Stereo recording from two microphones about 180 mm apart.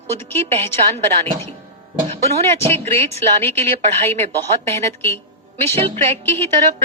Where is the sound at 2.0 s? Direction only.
35° right (ahead or behind).